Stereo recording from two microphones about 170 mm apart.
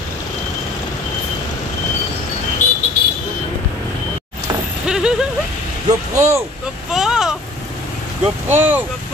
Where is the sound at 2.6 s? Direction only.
45° left (ahead or behind).